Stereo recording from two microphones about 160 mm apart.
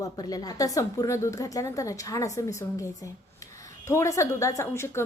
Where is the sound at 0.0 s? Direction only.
25° left (ahead or behind).